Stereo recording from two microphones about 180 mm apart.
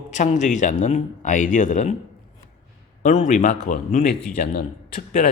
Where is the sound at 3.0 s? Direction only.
40° left (ahead or behind).